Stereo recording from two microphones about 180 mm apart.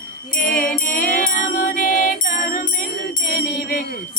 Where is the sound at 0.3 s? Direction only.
50° left (ahead or behind).